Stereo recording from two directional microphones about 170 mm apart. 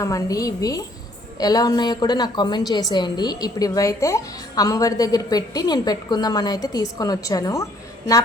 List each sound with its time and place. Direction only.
0.0 s a woman's voice: 20° left (ahead or behind)